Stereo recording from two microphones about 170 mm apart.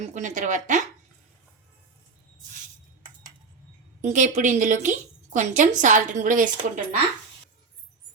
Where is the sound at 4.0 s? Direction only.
45° right (ahead or behind).